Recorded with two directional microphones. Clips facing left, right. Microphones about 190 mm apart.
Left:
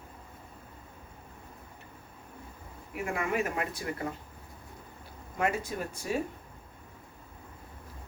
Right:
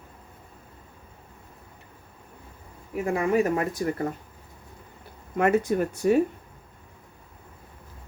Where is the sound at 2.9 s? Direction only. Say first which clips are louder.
Right 8 dB; 35° right (ahead or behind).